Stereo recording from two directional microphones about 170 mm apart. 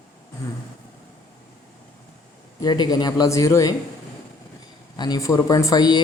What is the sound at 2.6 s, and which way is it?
Speech, 25° left (ahead or behind).